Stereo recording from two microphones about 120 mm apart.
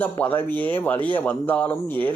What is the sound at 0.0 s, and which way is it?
Speech, 15° left (ahead or behind).